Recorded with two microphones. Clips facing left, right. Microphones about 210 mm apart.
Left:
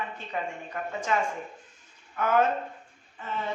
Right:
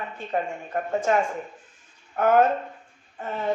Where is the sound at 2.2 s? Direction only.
50° right (ahead or behind).